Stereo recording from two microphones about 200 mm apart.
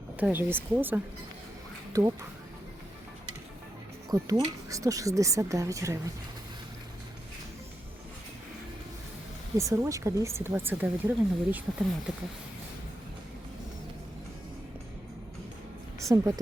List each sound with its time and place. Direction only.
0.2 s speech: 10° right (ahead or behind)
4.1 s speech: 15° right (ahead or behind)
9.6 s speech: 15° right (ahead or behind)
16.0 s a woman's voice: 15° right (ahead or behind)